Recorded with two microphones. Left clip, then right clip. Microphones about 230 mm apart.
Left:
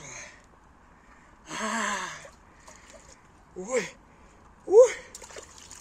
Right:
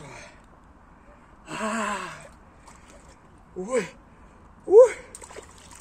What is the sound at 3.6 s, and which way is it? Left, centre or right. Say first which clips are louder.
Speech: right 2 dB; centre.